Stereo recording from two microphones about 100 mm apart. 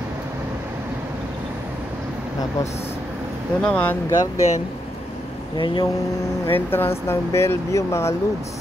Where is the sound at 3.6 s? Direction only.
10° left (ahead or behind).